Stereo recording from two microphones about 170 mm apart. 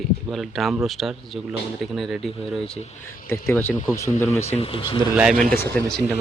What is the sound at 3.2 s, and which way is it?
Speech, 15° left (ahead or behind).